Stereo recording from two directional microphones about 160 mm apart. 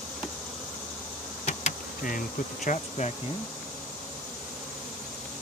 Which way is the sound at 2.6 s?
50° left (ahead or behind).